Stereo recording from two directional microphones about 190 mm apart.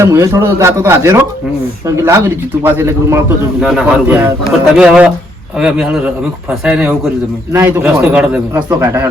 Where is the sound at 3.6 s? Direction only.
Centre (ahead or behind).